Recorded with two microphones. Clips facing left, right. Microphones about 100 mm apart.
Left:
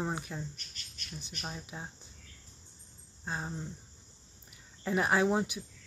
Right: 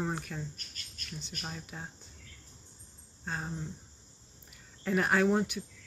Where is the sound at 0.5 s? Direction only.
40° right (ahead or behind).